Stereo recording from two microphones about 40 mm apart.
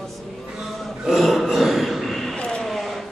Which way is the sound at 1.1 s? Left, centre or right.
Centre.